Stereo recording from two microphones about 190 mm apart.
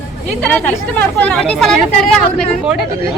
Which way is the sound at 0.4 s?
10° left (ahead or behind).